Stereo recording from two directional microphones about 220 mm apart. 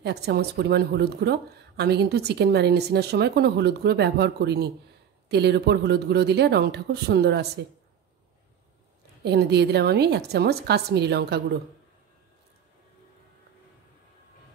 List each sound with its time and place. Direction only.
0.0 s speech: 50° right (ahead or behind)
9.2 s speech: 50° right (ahead or behind)